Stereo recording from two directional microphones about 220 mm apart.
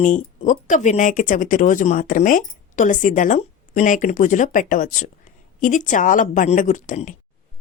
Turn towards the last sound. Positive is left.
turn(degrees=35)  # may be behind; listen again after turning